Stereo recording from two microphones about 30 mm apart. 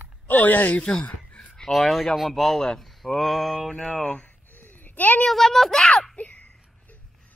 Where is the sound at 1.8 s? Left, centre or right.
Centre.